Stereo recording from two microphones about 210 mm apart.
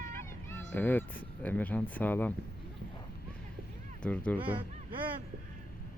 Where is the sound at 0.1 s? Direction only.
5° left (ahead or behind).